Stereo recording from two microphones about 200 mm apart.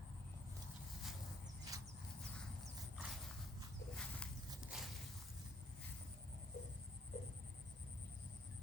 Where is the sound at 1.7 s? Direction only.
15° right (ahead or behind).